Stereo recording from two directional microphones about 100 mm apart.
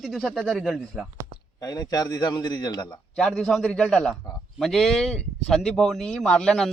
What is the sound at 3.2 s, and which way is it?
A man's voice, 5° left (ahead or behind).